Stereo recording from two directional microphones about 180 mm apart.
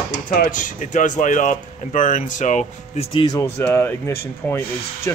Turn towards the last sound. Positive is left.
turn(degrees=15)  # may be behind; listen again after turning